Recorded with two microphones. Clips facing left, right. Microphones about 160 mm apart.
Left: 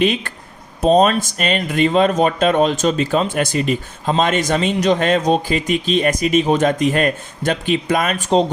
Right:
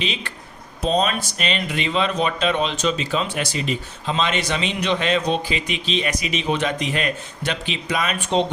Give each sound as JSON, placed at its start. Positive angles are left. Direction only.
{"t": 0.0, "sound": "speech", "side_deg": 50}